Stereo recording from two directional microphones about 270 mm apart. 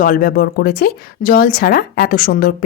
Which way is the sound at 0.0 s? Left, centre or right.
Left.